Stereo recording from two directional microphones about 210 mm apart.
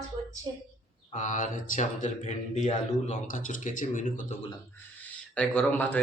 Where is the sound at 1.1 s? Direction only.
35° left (ahead or behind).